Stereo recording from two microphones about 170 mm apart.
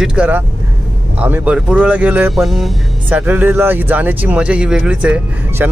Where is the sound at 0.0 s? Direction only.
5° right (ahead or behind).